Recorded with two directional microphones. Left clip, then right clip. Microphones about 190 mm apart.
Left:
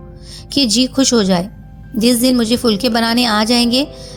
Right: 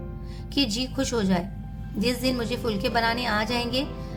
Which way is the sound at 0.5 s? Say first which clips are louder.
Left 12 dB; 35° left (ahead or behind).